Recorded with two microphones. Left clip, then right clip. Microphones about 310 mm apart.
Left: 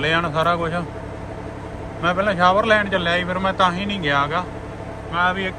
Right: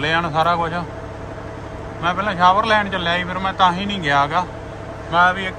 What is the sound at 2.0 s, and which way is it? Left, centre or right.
Speech, centre.